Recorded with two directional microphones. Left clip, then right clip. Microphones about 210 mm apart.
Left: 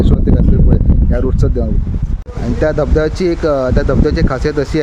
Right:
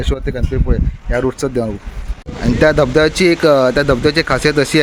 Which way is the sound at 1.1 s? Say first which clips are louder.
Right 3 dB; centre (ahead or behind).